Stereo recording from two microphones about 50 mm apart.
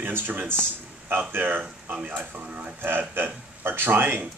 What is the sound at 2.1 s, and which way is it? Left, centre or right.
Speech, right.